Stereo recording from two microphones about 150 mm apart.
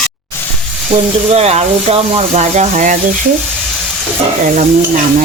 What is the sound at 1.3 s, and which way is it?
Speech, 45° right (ahead or behind).